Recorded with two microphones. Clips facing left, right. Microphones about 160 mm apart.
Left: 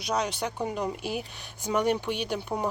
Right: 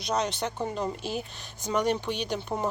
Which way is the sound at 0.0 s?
10° left (ahead or behind).